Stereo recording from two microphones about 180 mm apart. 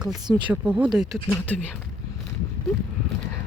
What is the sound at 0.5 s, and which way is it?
Speech, 5° right (ahead or behind).